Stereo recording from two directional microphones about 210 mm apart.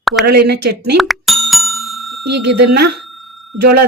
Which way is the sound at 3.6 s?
50° right (ahead or behind).